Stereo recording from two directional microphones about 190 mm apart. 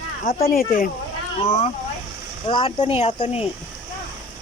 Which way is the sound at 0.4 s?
50° left (ahead or behind).